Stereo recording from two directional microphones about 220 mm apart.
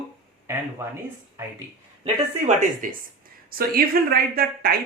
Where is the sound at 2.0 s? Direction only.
35° right (ahead or behind).